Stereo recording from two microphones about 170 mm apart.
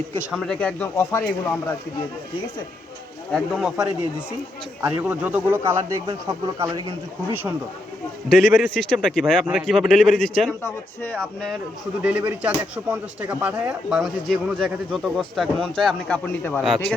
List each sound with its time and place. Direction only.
0.3 s speech: 5° left (ahead or behind)
3.3 s speech: centre (ahead or behind)
4.9 s speech: 10° right (ahead or behind)
8.3 s speech: 5° left (ahead or behind)
12.0 s speech: 5° right (ahead or behind)